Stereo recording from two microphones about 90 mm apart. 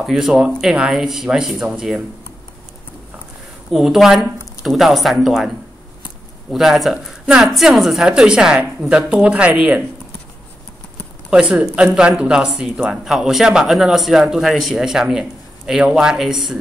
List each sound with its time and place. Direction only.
0.0 s speech: 5° right (ahead or behind)
3.7 s speech: 5° right (ahead or behind)
6.5 s speech: centre (ahead or behind)
11.2 s speech: 10° right (ahead or behind)